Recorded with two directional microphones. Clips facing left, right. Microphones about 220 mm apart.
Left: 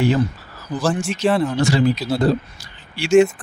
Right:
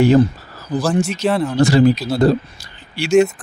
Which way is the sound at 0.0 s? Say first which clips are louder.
Right 6 dB; 45° right (ahead or behind).